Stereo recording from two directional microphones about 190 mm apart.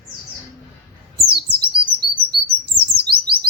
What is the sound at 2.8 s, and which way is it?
Chirp, 55° right (ahead or behind).